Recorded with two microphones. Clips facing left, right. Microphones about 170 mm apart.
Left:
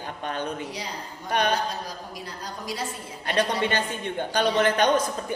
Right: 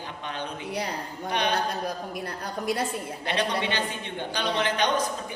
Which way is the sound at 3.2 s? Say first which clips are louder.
Left 3 dB; 45° left (ahead or behind).